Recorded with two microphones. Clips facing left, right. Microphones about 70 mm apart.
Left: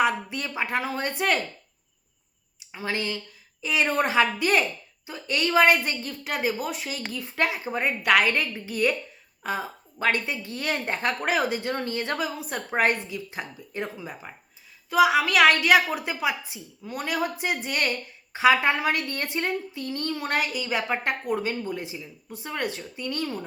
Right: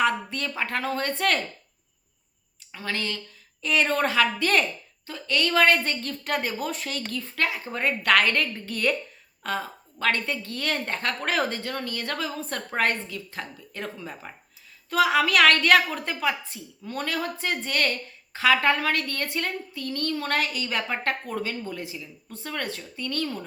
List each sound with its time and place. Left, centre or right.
0.0 s a woman's voice: centre
2.6 s a woman's voice: centre
11.6 s a woman's voice: left